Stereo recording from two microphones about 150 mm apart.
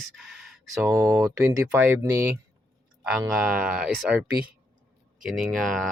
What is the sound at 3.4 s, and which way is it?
Speech, 5° right (ahead or behind).